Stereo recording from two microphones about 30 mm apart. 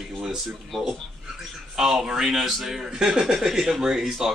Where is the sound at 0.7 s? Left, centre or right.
Centre.